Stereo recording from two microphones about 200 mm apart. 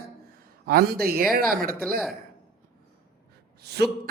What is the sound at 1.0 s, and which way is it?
A man's voice, 50° right (ahead or behind).